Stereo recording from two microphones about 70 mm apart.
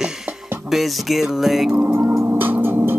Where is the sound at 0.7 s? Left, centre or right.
Centre.